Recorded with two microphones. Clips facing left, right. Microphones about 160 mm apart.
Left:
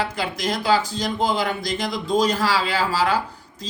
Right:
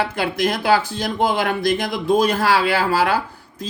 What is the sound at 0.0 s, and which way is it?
Speech, 55° right (ahead or behind).